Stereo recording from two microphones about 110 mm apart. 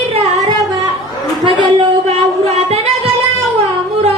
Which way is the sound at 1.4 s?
50° right (ahead or behind).